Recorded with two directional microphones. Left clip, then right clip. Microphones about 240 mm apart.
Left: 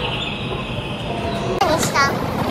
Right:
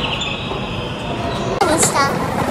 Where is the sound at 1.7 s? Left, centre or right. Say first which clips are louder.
Right 1 dB; centre.